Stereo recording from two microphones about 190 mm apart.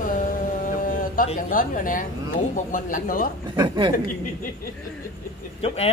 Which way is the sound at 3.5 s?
20° right (ahead or behind).